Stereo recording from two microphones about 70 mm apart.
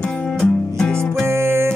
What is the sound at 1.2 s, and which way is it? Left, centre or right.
Music, right.